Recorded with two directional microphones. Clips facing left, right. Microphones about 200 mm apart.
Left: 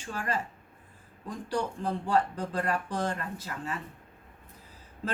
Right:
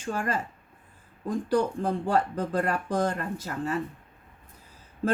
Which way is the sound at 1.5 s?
50° right (ahead or behind).